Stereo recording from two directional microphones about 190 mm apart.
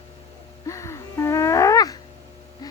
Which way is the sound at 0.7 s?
15° left (ahead or behind).